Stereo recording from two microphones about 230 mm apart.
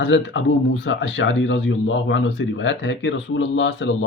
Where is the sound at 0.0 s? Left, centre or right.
Left.